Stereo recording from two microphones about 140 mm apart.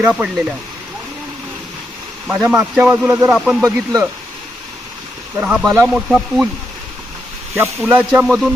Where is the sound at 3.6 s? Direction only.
20° right (ahead or behind).